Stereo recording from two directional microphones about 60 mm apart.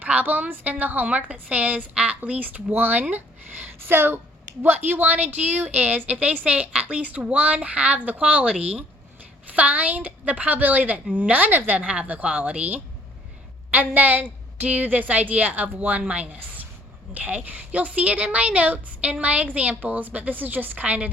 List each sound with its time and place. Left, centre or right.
0.0 s a woman's voice: right